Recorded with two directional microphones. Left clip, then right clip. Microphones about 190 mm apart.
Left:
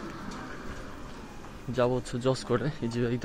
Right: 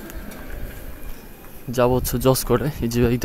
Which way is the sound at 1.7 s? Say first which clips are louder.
Right 8 dB; 30° right (ahead or behind).